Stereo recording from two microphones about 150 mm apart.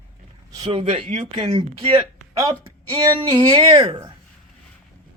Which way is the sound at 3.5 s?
30° right (ahead or behind).